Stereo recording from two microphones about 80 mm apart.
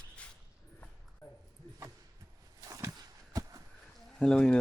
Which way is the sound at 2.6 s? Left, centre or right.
Right.